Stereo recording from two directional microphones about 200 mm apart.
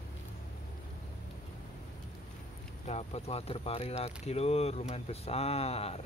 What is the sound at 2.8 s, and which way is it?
Speech, 30° left (ahead or behind).